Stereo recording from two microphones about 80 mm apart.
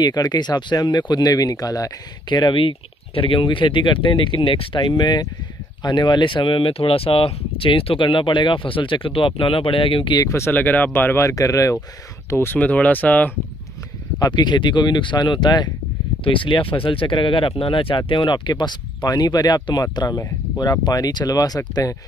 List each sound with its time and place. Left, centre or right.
0.0 s speech: left
7.7 s speech: left
10.2 s speech: left
10.5 s speech: left
11.2 s speech: left
12.5 s speech: centre
14.3 s speech: left
16.3 s speech: left